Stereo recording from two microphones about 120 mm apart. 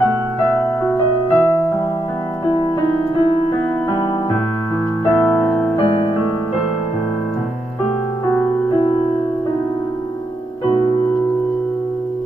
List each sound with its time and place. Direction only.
0.6 s music: 15° left (ahead or behind)
2.4 s music: 40° left (ahead or behind)
5.0 s electric piano: 10° left (ahead or behind)
5.9 s music: 40° left (ahead or behind)